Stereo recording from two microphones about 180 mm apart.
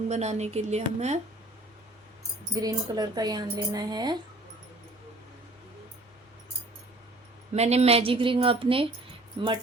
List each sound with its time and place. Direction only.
0.1 s speech: 40° right (ahead or behind)
2.6 s a woman's voice: 20° right (ahead or behind)
7.5 s speech: 35° right (ahead or behind)